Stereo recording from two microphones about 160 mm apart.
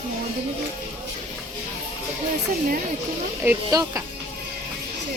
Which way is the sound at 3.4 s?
20° right (ahead or behind).